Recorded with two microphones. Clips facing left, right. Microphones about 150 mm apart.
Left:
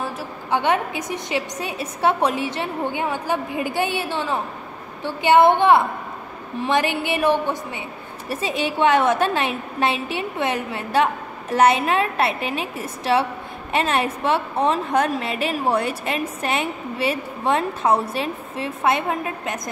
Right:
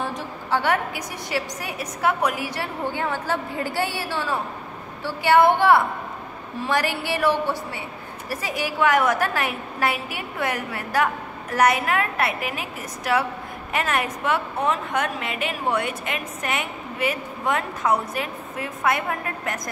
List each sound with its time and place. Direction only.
0.5 s a woman's voice: 20° left (ahead or behind)